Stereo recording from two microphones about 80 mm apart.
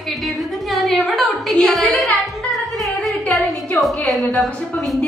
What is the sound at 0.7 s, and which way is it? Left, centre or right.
A woman's voice, centre.